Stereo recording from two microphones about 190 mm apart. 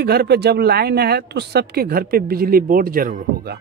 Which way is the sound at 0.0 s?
60° right (ahead or behind).